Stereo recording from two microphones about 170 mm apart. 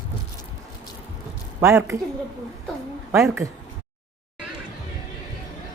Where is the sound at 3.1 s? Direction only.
15° right (ahead or behind).